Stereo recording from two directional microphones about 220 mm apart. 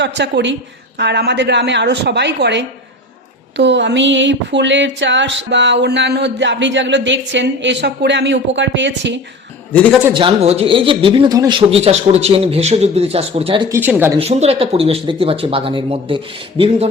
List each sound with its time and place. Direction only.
0.0 s speech: 50° right (ahead or behind)
9.7 s a man's voice: 5° left (ahead or behind)
10.2 s speech: 25° right (ahead or behind)
13.7 s speech: 10° right (ahead or behind)
14.2 s speech: 30° right (ahead or behind)